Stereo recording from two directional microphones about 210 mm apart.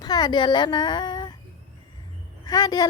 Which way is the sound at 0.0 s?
20° left (ahead or behind).